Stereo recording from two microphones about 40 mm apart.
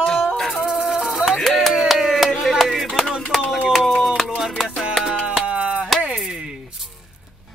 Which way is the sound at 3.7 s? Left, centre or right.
Centre.